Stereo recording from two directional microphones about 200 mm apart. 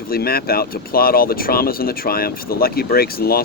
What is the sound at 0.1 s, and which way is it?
Speech, 50° left (ahead or behind).